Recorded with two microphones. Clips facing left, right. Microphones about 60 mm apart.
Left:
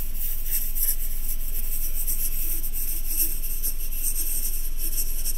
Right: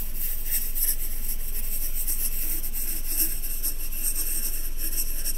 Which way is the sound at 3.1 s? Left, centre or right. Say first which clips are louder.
Right 2 dB; right.